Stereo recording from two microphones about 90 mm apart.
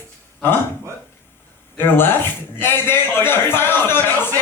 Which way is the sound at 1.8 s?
25° left (ahead or behind).